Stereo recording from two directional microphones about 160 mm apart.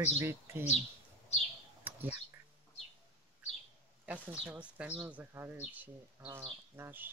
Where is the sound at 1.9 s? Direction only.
10° right (ahead or behind).